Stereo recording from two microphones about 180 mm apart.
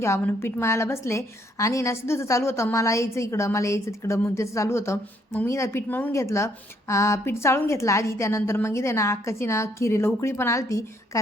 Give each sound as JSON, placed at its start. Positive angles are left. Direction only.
{"t": 0.0, "sound": "a woman's voice", "side_deg": 15}